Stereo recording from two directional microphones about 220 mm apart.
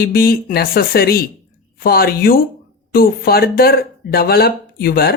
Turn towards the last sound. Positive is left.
turn(degrees=45)  # may be behind; listen again after turning